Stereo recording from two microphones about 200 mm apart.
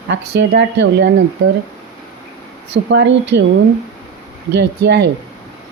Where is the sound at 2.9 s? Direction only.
65° right (ahead or behind).